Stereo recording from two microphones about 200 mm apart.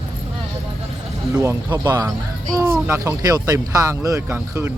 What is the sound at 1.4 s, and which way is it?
Speech, 20° right (ahead or behind).